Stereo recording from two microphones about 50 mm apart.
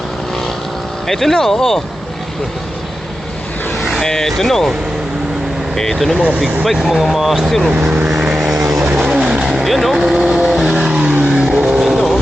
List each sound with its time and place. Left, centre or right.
1.0 s speech: centre
3.8 s vehicle: centre
4.0 s speech: centre
5.7 s speech: centre
6.1 s speech: right
6.7 s speech: centre
8.2 s vehicle: centre
9.6 s speech: centre
10.7 s vehicle: centre
11.0 s vehicle: right
11.3 s vehicle: centre